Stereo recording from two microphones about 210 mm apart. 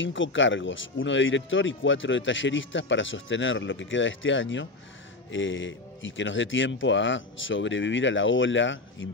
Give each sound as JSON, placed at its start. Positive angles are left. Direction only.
{"t": 0.0, "sound": "speech", "side_deg": 65}